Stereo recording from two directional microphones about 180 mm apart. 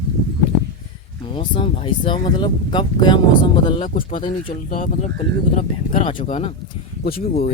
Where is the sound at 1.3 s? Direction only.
25° left (ahead or behind).